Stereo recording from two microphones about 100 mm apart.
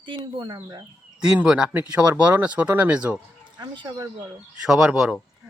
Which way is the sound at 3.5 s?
50° right (ahead or behind).